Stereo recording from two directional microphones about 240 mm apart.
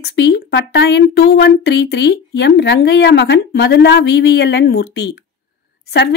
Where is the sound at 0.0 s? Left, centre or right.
Left.